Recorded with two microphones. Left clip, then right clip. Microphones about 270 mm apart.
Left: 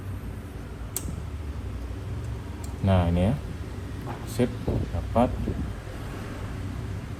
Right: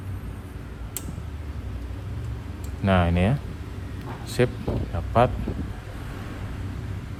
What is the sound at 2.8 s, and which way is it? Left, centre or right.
Speech, right.